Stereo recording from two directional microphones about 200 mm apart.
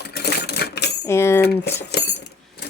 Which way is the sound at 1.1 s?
15° left (ahead or behind).